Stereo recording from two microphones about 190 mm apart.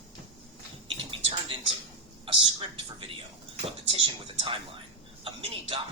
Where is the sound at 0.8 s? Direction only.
30° right (ahead or behind).